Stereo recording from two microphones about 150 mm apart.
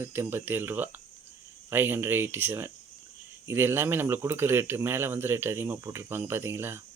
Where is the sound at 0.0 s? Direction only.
15° right (ahead or behind).